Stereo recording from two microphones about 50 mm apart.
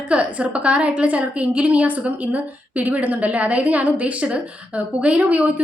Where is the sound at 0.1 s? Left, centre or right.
Right.